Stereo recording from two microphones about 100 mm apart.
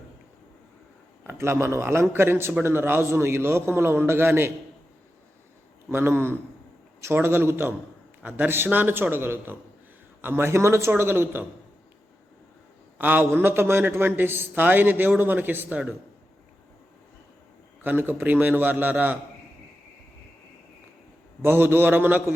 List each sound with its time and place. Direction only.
1.3 s a man's voice: 25° right (ahead or behind)
5.9 s a man's voice: 25° right (ahead or behind)
13.0 s a man's voice: 20° right (ahead or behind)
17.8 s a man's voice: 20° right (ahead or behind)
21.4 s a man's voice: 20° right (ahead or behind)